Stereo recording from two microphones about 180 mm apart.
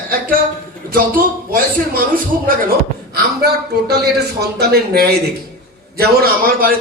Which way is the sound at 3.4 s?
60° right (ahead or behind).